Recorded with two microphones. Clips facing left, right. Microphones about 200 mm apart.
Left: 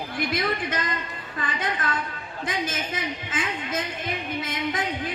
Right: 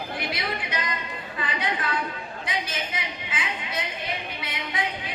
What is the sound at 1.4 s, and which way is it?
A woman's voice, 50° left (ahead or behind).